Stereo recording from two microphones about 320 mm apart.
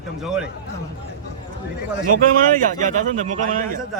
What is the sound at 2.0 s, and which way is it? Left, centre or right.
A man's voice, right.